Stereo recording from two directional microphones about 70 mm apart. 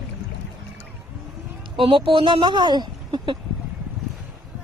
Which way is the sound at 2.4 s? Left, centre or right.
Right.